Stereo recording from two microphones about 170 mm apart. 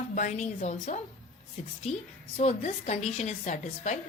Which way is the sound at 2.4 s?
40° left (ahead or behind).